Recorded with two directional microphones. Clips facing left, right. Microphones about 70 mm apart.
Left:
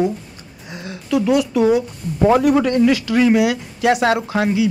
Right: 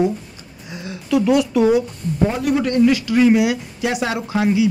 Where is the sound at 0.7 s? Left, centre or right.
Left.